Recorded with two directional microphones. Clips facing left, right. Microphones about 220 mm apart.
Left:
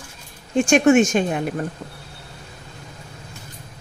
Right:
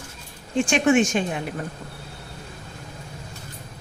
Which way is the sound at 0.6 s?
45° left (ahead or behind).